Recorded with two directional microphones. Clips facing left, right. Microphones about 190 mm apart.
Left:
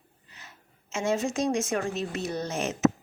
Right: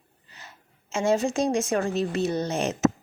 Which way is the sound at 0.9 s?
35° right (ahead or behind).